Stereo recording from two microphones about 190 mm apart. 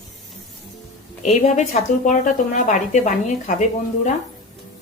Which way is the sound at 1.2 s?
40° left (ahead or behind).